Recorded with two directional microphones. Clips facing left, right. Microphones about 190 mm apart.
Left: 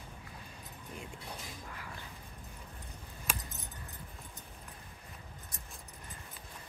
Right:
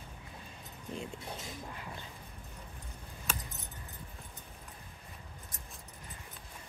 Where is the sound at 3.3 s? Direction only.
10° left (ahead or behind).